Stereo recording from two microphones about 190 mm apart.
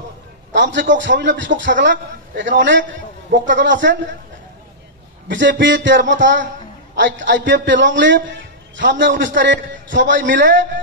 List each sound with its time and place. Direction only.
0.5 s a man's voice: 70° right (ahead or behind)
5.3 s a man's voice: 70° right (ahead or behind)